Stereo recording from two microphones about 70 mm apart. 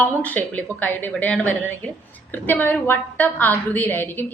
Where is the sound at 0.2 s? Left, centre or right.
Left.